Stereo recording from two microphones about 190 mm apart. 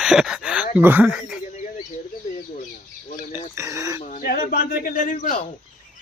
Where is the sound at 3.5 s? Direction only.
15° right (ahead or behind).